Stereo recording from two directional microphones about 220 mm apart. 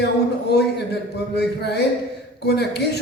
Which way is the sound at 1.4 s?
50° left (ahead or behind).